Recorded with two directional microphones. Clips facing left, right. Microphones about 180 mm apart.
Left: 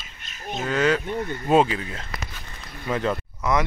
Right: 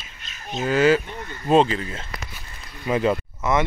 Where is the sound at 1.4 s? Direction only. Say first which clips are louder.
Right 2 dB; 5° left (ahead or behind).